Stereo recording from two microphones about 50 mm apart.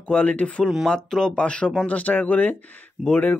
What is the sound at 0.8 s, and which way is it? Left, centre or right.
Speech, centre.